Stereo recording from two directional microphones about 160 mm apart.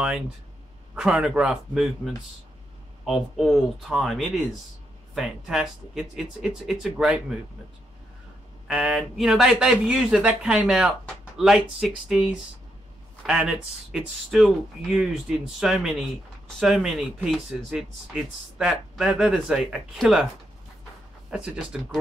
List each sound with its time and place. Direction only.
0.9 s speech: 5° right (ahead or behind)
8.6 s speech: 5° right (ahead or behind)
13.3 s speech: 5° right (ahead or behind)
21.3 s speech: 5° right (ahead or behind)